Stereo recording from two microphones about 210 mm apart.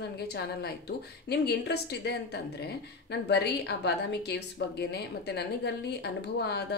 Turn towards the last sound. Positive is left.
turn(degrees=50)  # may be behind; listen again after turning